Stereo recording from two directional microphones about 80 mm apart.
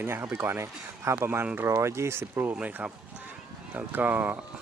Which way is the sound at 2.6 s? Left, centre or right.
Centre.